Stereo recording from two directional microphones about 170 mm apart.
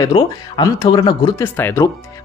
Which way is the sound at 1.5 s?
15° left (ahead or behind).